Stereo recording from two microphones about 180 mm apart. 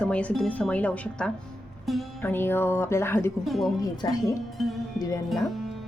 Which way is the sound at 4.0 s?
20° left (ahead or behind).